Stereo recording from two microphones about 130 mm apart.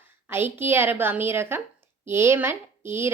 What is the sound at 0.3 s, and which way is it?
A woman's voice, 15° right (ahead or behind).